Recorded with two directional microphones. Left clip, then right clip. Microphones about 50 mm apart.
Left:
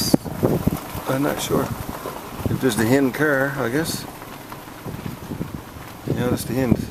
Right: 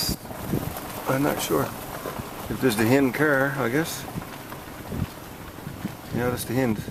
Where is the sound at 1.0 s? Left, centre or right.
Centre.